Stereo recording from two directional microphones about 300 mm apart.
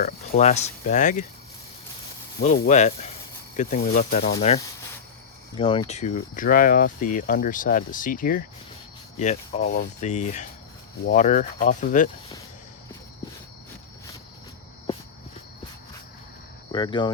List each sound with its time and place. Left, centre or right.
0.0 s speech: left
2.4 s speech: left
16.7 s speech: centre